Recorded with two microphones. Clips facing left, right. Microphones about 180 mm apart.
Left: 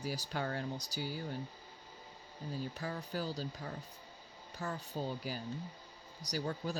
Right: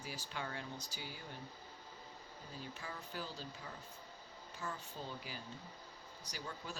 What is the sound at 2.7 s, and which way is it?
Speech, 40° left (ahead or behind).